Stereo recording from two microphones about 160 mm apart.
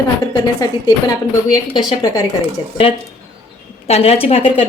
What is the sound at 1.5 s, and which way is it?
Speech, 25° left (ahead or behind).